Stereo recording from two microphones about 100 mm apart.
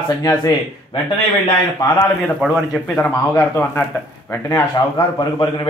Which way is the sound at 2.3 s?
5° right (ahead or behind).